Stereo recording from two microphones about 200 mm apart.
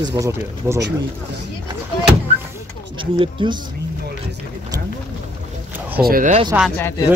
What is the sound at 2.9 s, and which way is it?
Speech, 25° right (ahead or behind).